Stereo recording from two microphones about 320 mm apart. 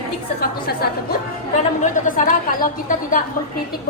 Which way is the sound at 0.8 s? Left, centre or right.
Left.